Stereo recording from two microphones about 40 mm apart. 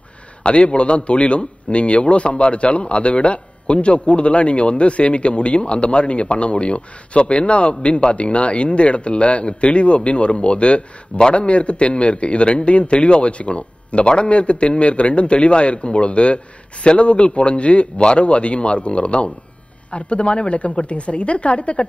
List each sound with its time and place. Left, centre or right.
0.4 s a man's voice: left